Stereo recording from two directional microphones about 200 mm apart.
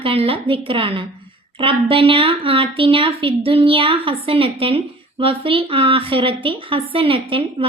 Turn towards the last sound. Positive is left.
turn(degrees=-25)  # may be behind; listen again after turning